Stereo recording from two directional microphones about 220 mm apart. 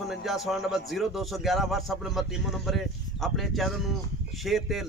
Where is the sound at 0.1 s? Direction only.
Centre (ahead or behind).